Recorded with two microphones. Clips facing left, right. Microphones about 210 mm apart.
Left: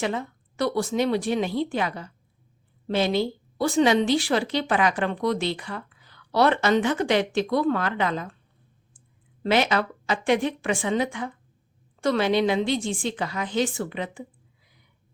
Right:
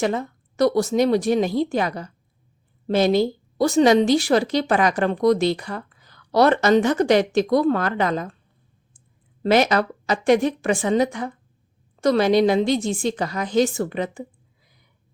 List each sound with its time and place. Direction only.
0.0 s a woman's voice: 40° right (ahead or behind)
9.4 s a woman's voice: 40° right (ahead or behind)